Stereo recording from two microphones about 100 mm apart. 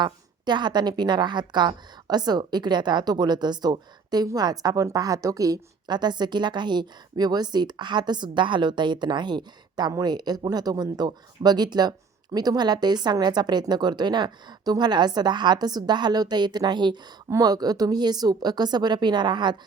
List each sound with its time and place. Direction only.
0.0 s a woman's voice: 45° right (ahead or behind)
17.2 s a woman's voice: 35° right (ahead or behind)